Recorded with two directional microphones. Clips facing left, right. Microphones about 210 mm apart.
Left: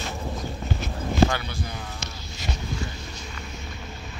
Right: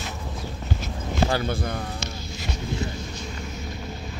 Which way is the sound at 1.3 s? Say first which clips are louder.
Right 5 dB; 40° right (ahead or behind).